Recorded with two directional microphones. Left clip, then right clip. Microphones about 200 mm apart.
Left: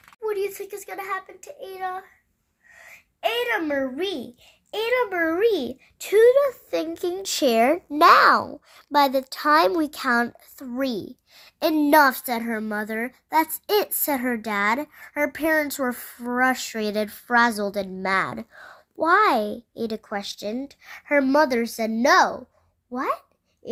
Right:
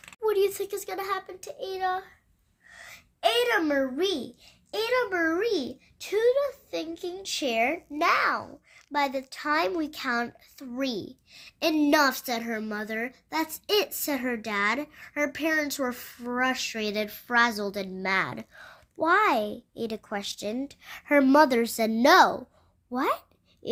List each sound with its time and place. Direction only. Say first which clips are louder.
0.2 s a child's voice: right 2 dB; 10° right (ahead or behind)
2.7 s a sound: even; centre (ahead or behind); by 4.2 s 20° left (ahead or behind)
4.7 s a child's voice: left 3 dB; 30° left (ahead or behind); by 23.1 s 5° right (ahead or behind)